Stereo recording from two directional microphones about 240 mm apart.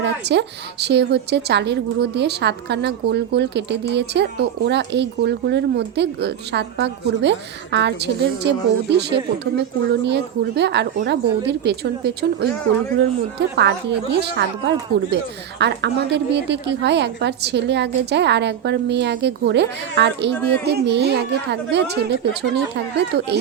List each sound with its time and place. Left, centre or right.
0.0 s a woman's voice: right
13.6 s a woman's voice: right